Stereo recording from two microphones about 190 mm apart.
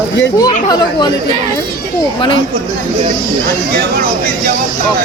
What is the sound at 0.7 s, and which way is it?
Speech, 20° left (ahead or behind).